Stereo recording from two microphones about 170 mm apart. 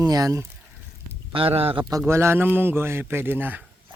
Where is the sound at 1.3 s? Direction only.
35° right (ahead or behind).